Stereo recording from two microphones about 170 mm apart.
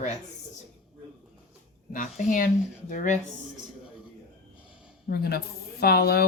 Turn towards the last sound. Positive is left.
turn(degrees=70)  # may be behind; listen again after turning